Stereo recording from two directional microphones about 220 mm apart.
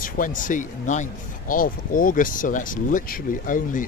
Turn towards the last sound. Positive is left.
turn(degrees=35)  # may be behind; listen again after turning